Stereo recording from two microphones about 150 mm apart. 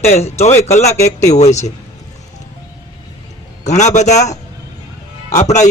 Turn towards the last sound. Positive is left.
turn(degrees=50)  # may be behind; listen again after turning